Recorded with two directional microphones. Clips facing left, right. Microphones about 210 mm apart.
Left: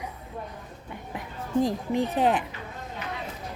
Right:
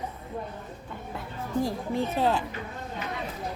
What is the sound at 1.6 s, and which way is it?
Speech, 20° left (ahead or behind).